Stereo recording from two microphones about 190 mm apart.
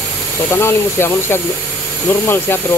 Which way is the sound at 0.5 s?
15° left (ahead or behind).